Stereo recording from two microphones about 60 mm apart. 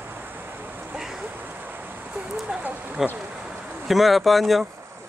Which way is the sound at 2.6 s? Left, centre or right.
Right.